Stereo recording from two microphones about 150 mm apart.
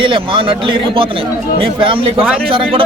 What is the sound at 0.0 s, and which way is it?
A man's voice, 35° right (ahead or behind).